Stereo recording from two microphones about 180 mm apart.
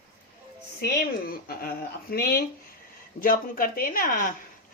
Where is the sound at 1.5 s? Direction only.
55° left (ahead or behind).